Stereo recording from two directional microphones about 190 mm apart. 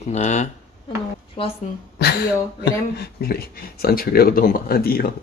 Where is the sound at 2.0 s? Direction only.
60° left (ahead or behind).